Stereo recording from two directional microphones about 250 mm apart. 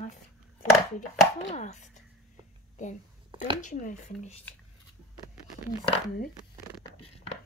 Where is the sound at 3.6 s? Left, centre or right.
Left.